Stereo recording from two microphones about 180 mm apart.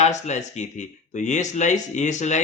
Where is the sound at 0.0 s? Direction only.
40° left (ahead or behind).